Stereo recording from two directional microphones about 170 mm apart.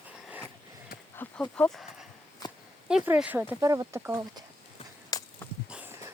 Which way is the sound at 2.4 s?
20° left (ahead or behind).